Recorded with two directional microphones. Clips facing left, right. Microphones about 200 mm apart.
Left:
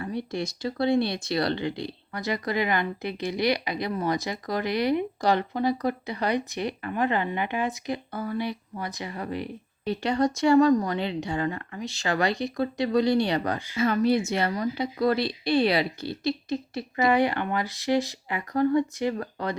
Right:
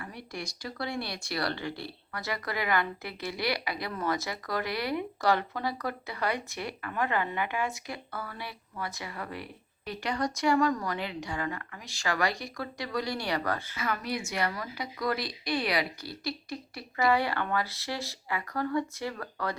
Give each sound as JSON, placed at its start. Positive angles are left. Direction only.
{"t": 0.0, "sound": "a woman's voice", "side_deg": 25}